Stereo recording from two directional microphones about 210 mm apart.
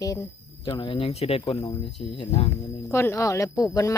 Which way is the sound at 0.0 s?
15° left (ahead or behind).